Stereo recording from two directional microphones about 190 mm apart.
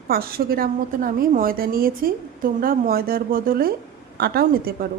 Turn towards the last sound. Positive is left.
turn(degrees=-50)  # may be behind; listen again after turning